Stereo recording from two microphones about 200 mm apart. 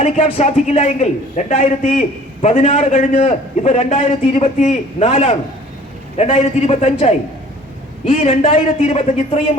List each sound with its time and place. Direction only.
0.0 s a man's voice: 35° left (ahead or behind)